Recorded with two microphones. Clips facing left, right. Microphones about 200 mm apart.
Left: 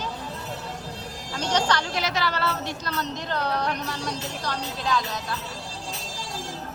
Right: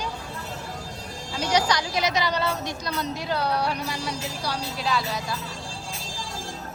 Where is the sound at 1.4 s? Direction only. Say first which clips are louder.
Right 1 dB; 10° right (ahead or behind).